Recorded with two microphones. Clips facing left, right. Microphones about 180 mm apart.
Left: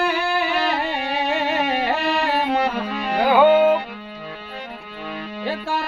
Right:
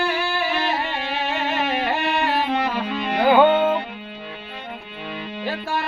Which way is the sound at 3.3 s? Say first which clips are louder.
Left 1 dB; 10° left (ahead or behind).